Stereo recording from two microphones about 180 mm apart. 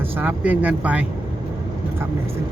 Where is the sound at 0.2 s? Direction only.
10° right (ahead or behind).